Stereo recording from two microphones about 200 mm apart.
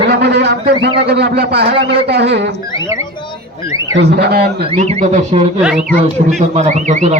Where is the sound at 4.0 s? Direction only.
55° right (ahead or behind).